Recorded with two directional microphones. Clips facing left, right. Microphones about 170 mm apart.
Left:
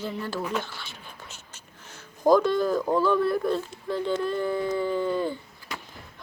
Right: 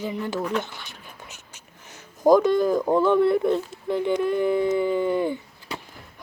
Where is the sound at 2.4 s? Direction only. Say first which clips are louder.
Right 4 dB; 15° right (ahead or behind).